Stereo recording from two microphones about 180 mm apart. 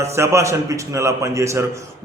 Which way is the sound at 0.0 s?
15° right (ahead or behind).